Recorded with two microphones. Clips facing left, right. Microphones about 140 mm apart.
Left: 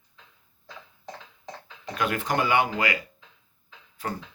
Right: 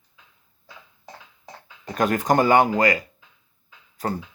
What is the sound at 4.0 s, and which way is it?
Music, 40° right (ahead or behind).